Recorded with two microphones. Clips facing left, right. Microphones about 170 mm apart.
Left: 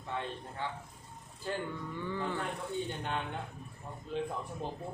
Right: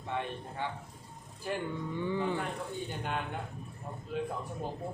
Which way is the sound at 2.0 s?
15° right (ahead or behind).